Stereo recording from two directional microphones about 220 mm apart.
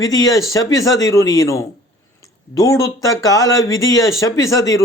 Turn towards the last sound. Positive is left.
turn(degrees=15)  # may be behind; listen again after turning